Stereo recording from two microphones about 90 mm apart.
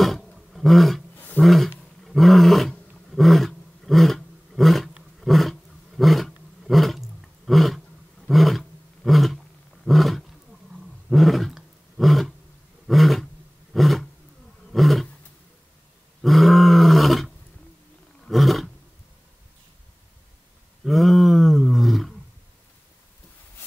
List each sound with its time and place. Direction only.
0.0 s roar: centre (ahead or behind)
1.1 s roaring cats: 20° left (ahead or behind)
1.4 s roaring cats: centre (ahead or behind)
1.8 s roar: centre (ahead or behind)
16.2 s roar: centre (ahead or behind)
20.8 s roar: centre (ahead or behind)